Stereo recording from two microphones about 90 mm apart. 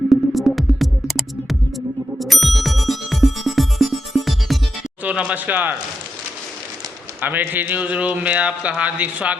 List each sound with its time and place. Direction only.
0.1 s music: centre (ahead or behind)
5.0 s speech: 15° right (ahead or behind)
7.2 s speech: 20° right (ahead or behind)